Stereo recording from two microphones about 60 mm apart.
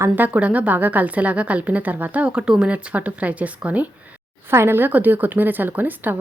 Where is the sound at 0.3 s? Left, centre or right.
Right.